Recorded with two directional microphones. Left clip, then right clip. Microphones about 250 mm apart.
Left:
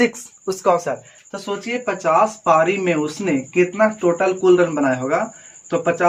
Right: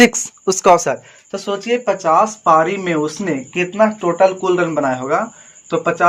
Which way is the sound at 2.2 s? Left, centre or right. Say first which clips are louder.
Right 2 dB; right.